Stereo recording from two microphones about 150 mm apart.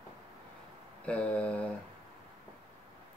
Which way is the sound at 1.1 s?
10° left (ahead or behind).